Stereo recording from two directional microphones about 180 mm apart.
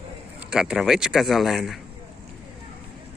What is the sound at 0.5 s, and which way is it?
Speech, 5° right (ahead or behind).